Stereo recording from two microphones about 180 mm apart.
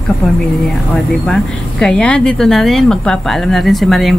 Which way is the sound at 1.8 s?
5° left (ahead or behind).